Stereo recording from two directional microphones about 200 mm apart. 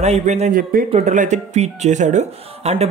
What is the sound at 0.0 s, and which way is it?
A man's voice, 35° right (ahead or behind).